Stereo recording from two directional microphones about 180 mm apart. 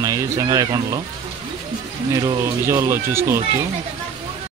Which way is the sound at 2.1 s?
20° right (ahead or behind).